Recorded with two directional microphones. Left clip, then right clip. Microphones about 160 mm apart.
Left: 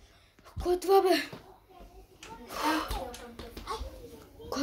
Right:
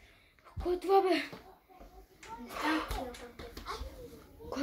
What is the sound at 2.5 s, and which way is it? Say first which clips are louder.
Speech: left 3 dB; 20° left (ahead or behind).